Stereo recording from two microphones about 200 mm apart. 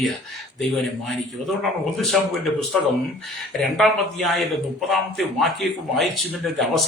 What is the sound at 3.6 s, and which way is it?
A man's voice, centre (ahead or behind).